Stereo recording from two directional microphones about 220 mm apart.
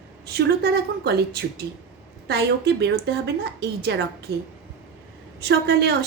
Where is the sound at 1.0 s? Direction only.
45° right (ahead or behind).